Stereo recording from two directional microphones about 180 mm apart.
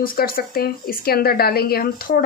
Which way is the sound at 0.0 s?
55° left (ahead or behind).